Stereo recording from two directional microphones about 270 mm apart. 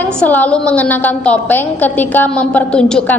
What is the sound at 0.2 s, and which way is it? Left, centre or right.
A woman's voice, centre.